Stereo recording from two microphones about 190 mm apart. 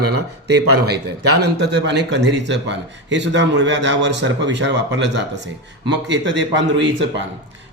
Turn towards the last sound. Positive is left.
turn(degrees=-70)  # may be behind; listen again after turning